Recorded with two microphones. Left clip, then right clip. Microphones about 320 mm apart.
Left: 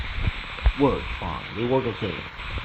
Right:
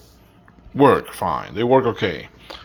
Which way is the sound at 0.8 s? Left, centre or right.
Right.